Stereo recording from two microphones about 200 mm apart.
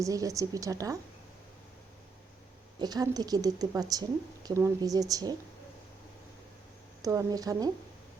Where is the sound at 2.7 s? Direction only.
20° right (ahead or behind).